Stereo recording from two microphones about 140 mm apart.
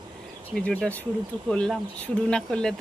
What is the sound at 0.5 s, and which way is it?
Speech, 10° left (ahead or behind).